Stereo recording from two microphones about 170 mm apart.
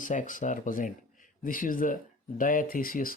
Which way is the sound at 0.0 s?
50° left (ahead or behind).